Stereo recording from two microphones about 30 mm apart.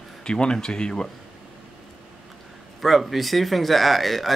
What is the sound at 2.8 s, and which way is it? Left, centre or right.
A man's voice, centre.